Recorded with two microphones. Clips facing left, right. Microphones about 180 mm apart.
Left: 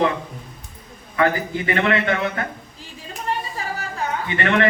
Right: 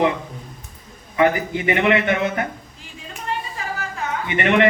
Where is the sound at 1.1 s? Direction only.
20° right (ahead or behind).